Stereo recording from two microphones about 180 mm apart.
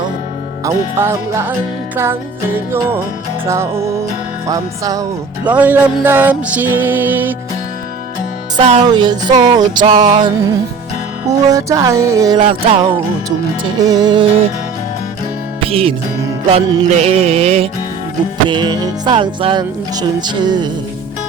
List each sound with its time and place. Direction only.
0.6 s music: 15° right (ahead or behind)
5.5 s music: 10° right (ahead or behind)
8.5 s music: 35° right (ahead or behind)
8.9 s music: 25° right (ahead or behind)
15.6 s music: 30° right (ahead or behind)